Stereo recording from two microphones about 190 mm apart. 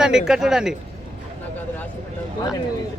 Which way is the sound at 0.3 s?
5° right (ahead or behind).